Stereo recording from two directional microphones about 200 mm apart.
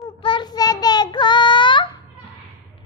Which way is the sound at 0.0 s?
25° left (ahead or behind).